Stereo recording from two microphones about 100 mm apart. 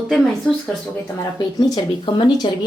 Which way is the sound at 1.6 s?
45° left (ahead or behind).